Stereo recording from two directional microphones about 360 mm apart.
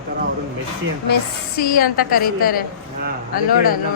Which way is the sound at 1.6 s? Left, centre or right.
Left.